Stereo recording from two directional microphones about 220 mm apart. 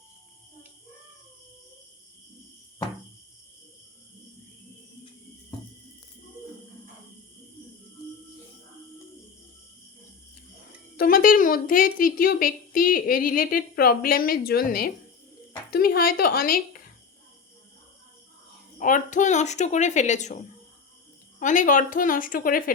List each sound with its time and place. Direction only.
10.9 s a woman's voice: 40° left (ahead or behind)
18.8 s a woman's voice: 35° left (ahead or behind)